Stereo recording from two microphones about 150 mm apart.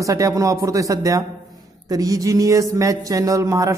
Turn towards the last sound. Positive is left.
turn(degrees=-20)  # may be behind; listen again after turning